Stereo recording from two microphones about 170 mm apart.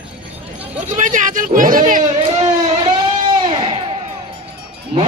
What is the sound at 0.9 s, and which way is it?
Speech, 50° right (ahead or behind).